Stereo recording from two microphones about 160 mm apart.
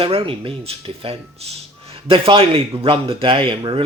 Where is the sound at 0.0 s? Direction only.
35° right (ahead or behind).